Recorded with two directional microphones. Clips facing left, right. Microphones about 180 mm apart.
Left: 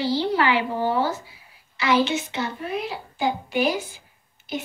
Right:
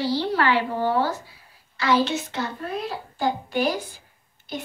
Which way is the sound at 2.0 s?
Centre (ahead or behind).